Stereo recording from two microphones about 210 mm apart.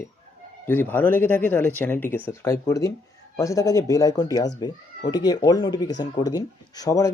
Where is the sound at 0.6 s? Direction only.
10° left (ahead or behind).